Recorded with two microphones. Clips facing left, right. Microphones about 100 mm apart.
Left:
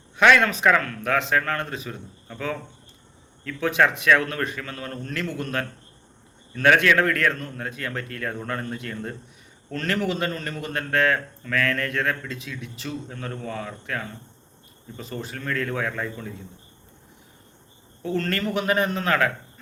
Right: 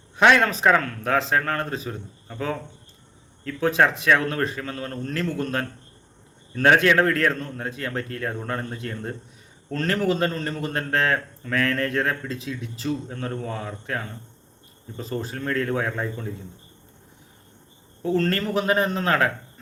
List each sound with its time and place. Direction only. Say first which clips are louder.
0.2 s a man's voice: even; 30° right (ahead or behind)
18.0 s a man's voice: right 3 dB; 30° right (ahead or behind)